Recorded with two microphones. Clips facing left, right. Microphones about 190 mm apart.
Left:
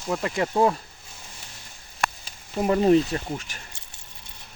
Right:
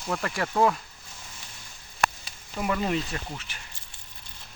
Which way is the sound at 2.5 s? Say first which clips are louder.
Left 9 dB; 35° left (ahead or behind).